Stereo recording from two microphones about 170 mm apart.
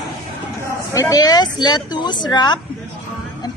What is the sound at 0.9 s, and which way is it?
Speech, 20° left (ahead or behind).